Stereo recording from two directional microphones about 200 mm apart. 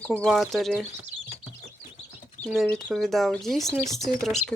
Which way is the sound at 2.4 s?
Centre (ahead or behind).